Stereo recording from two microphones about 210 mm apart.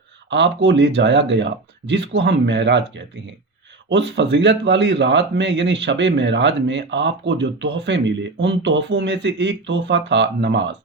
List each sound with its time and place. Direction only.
0.3 s a man's voice: 60° right (ahead or behind)
3.8 s a man's voice: 60° right (ahead or behind)